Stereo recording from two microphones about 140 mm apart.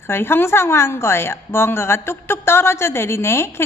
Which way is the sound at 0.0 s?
15° left (ahead or behind).